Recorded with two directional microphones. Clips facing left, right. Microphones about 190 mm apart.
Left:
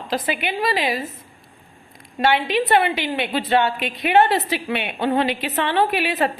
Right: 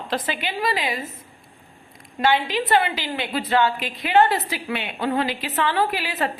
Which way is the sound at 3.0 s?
25° left (ahead or behind).